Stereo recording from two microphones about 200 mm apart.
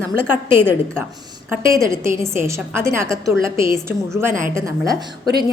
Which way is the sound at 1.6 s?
15° right (ahead or behind).